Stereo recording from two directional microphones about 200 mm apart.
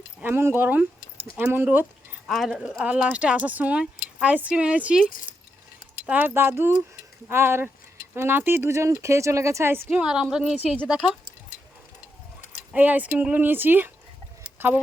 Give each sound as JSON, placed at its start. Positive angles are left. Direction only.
{"t": 0.2, "sound": "speech", "side_deg": -10}
{"t": 2.2, "sound": "speech", "side_deg": 0}
{"t": 6.1, "sound": "speech", "side_deg": -10}
{"t": 12.7, "sound": "speech", "side_deg": -10}